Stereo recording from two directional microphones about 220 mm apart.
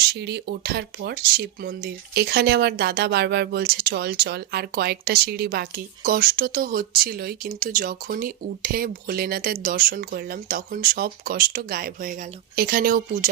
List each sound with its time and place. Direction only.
0.0 s speech: 50° right (ahead or behind)